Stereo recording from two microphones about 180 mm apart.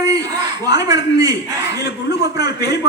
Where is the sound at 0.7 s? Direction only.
20° right (ahead or behind).